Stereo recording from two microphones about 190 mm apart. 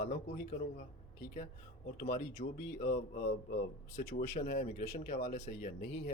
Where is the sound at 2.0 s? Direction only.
45° left (ahead or behind).